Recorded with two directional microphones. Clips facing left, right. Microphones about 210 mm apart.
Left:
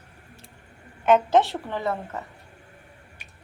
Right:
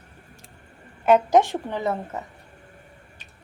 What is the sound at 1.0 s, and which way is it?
Speech, 10° right (ahead or behind).